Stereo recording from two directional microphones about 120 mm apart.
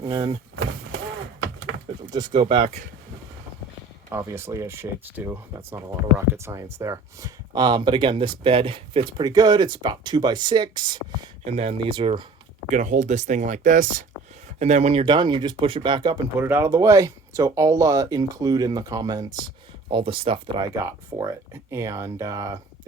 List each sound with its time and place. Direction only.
0.0 s speech: 35° right (ahead or behind)
2.0 s speech: 35° right (ahead or behind)
2.4 s speech: 45° right (ahead or behind)
4.1 s speech: 20° right (ahead or behind); by 11.0 s 40° right (ahead or behind)
11.4 s speech: 60° right (ahead or behind)
12.7 s speech: 90° right
14.6 s speech: 70° right (ahead or behind)
15.0 s speech: 40° right (ahead or behind)
16.4 s speech: 20° right (ahead or behind)
19.9 s speech: 45° right (ahead or behind)
20.7 s speech: 25° right (ahead or behind)